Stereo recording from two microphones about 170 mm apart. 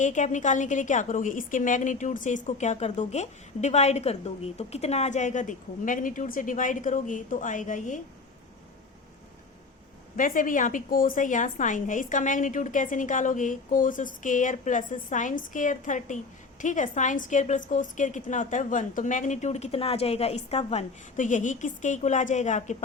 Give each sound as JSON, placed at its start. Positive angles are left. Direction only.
{"t": 0.0, "sound": "a woman's voice", "side_deg": 45}
{"t": 10.2, "sound": "a woman's voice", "side_deg": 50}